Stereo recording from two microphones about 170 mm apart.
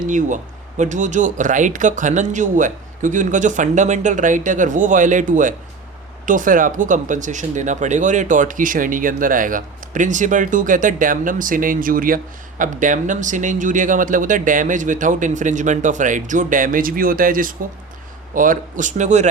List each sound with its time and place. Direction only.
0.0 s speech: 50° right (ahead or behind)